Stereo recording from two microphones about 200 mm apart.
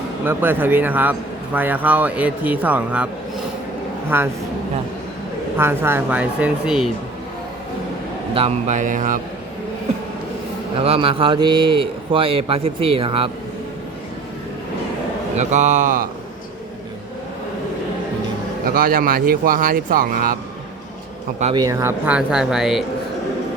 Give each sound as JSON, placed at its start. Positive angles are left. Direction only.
{"t": 0.3, "sound": "speech", "side_deg": -10}
{"t": 4.1, "sound": "speech", "side_deg": -10}
{"t": 5.5, "sound": "speech", "side_deg": -10}
{"t": 8.3, "sound": "speech", "side_deg": -30}
{"t": 10.8, "sound": "speech", "side_deg": -30}
{"t": 15.4, "sound": "speech", "side_deg": -35}
{"t": 18.6, "sound": "speech", "side_deg": -45}
{"t": 21.5, "sound": "speech", "side_deg": -15}